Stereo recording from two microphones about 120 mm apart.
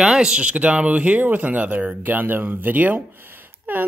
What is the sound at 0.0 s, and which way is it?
Speech, 5° right (ahead or behind).